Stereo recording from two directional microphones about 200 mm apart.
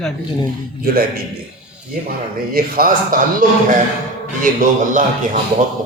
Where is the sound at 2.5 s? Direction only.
45° right (ahead or behind).